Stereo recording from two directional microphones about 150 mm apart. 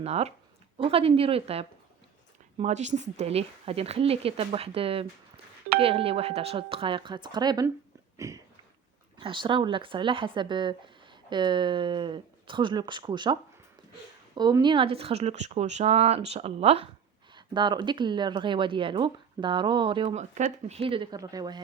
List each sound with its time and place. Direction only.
0.0 s speech: 45° right (ahead or behind)
2.6 s speech: 50° right (ahead or behind); by 7.7 s 25° right (ahead or behind)
8.1 s a sound: 20° right (ahead or behind)
9.1 s speech: 35° right (ahead or behind)
14.3 s speech: 30° right (ahead or behind)
17.3 s speech: 30° right (ahead or behind)
20.1 s speech: 50° right (ahead or behind); by 21.6 s 25° right (ahead or behind)